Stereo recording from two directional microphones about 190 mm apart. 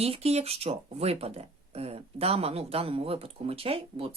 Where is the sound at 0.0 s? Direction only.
30° right (ahead or behind).